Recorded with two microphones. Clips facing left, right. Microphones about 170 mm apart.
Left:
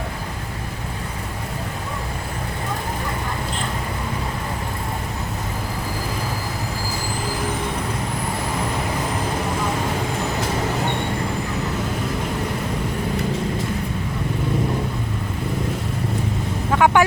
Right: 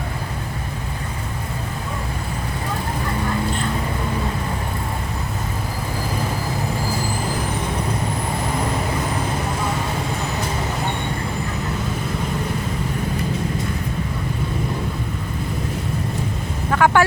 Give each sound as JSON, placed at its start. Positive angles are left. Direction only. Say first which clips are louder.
{"t": 16.7, "sound": "vehicle", "louder": "even", "side_deg": 15}